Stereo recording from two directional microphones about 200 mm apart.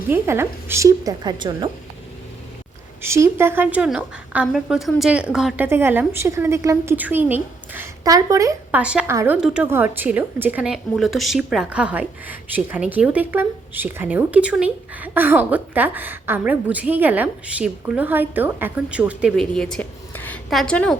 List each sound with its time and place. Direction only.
0.1 s a woman's voice: 10° right (ahead or behind)
3.0 s a woman's voice: 10° right (ahead or behind)
8.8 s a woman's voice: 5° right (ahead or behind)